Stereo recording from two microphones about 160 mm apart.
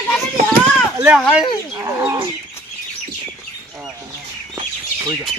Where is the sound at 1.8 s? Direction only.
15° right (ahead or behind).